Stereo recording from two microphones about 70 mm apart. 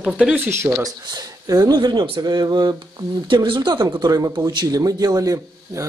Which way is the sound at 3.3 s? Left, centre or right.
Right.